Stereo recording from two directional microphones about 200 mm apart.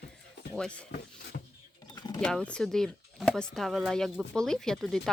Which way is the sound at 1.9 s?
20° left (ahead or behind).